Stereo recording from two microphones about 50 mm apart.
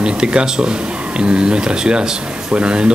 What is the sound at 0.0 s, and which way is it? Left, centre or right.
Speech, centre.